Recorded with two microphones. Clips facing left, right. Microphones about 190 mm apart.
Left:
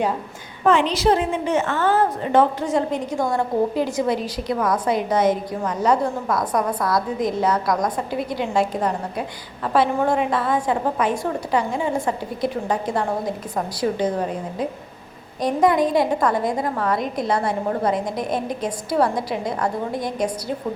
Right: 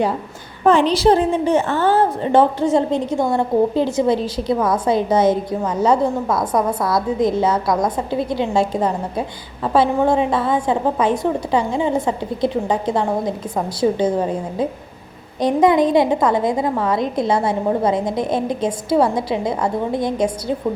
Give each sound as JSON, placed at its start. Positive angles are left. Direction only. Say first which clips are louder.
{"t": 0.6, "sound": "a woman's voice", "louder": "right 4 dB", "side_deg": -35}